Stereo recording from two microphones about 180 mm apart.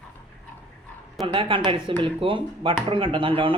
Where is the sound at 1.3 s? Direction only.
30° right (ahead or behind).